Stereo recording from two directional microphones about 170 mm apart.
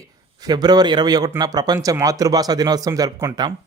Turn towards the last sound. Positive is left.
turn(degrees=-20)  # may be behind; listen again after turning